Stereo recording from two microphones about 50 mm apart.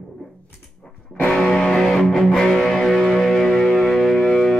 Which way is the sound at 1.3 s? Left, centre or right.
Centre.